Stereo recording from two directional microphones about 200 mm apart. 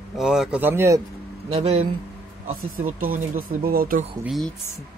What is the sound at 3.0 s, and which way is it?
Speech, 45° right (ahead or behind).